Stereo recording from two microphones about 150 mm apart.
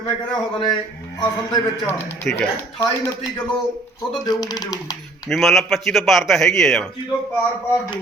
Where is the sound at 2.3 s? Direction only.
15° left (ahead or behind).